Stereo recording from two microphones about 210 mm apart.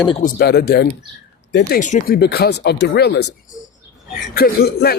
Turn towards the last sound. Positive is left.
turn(degrees=50)  # may be behind; listen again after turning